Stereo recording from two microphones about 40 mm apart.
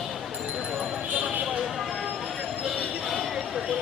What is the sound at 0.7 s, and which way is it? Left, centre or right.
Clip-clop, right.